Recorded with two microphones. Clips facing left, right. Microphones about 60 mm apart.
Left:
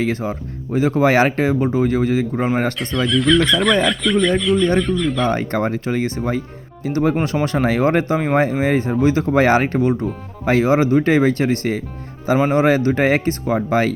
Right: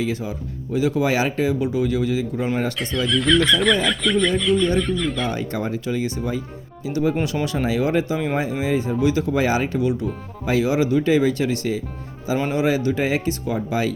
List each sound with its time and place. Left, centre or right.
0.0 s speech: left
2.9 s speech: centre
5.3 s speech: left